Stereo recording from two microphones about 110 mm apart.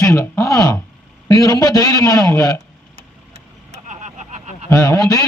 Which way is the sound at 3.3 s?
90° right.